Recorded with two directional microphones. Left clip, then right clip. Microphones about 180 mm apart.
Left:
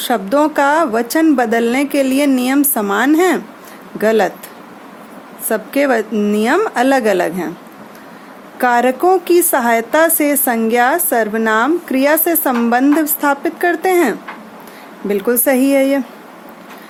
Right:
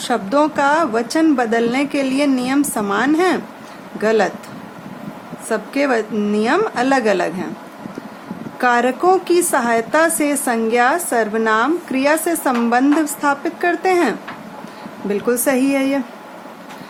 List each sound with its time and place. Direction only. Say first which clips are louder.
0.0 s a woman's voice: left 2 dB; 25° left (ahead or behind)
5.5 s a woman's voice: left 3 dB; 30° left (ahead or behind)
8.5 s a woman's voice: left 3 dB; 25° left (ahead or behind)